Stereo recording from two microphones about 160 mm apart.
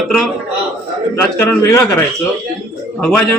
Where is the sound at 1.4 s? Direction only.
15° left (ahead or behind).